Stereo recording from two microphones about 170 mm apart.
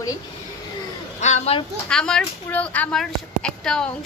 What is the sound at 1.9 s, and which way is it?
A woman's voice, 5° left (ahead or behind).